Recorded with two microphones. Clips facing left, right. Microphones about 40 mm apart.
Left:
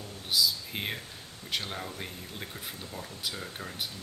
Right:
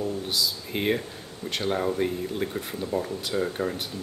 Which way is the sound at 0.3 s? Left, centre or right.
Centre.